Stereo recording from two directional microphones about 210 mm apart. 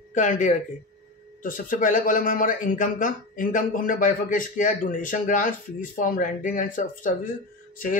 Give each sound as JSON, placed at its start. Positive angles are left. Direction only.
{"t": 0.1, "sound": "speech", "side_deg": 35}